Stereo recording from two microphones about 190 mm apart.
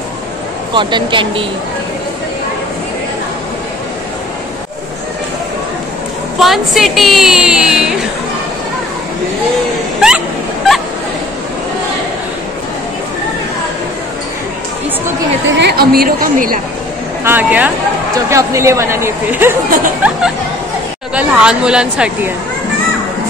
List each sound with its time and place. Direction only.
0.7 s speech: 25° right (ahead or behind)
6.4 s a woman's voice: centre (ahead or behind)
9.9 s a sound: 5° right (ahead or behind)
15.4 s a woman's voice: 60° right (ahead or behind)
17.2 s speech: 10° right (ahead or behind)
21.1 s a woman's voice: 5° right (ahead or behind)